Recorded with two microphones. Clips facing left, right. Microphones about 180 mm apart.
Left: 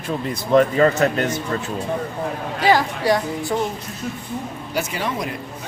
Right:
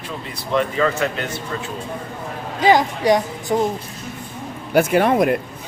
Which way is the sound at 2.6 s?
20° right (ahead or behind).